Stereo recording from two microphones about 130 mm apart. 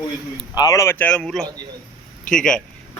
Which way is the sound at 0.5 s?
25° left (ahead or behind).